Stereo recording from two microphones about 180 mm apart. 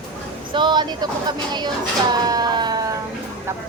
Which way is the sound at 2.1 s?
20° right (ahead or behind).